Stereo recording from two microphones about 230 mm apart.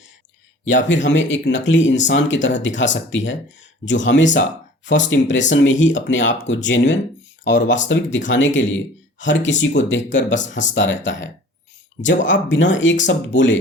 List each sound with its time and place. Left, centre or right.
0.6 s speech: left